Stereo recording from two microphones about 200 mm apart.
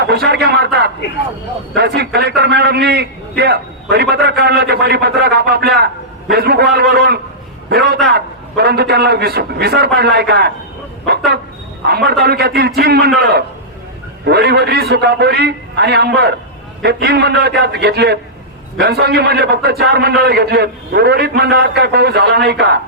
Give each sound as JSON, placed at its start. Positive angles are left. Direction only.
{"t": 0.0, "sound": "a man's voice", "side_deg": -55}
{"t": 11.9, "sound": "a man's voice", "side_deg": -55}